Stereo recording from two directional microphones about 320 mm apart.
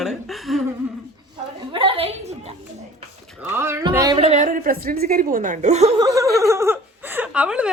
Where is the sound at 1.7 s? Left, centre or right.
Centre.